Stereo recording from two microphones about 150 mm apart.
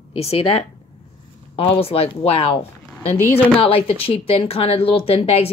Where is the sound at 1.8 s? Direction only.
40° left (ahead or behind).